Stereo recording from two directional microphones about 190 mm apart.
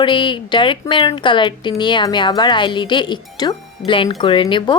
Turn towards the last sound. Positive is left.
turn(degrees=25)  # may be behind; listen again after turning